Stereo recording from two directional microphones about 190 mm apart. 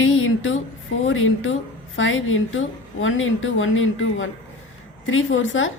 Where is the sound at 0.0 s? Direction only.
90° left.